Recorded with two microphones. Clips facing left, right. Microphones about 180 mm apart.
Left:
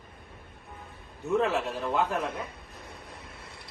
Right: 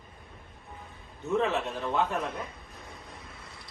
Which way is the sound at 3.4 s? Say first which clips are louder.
Left 1 dB; 60° left (ahead or behind).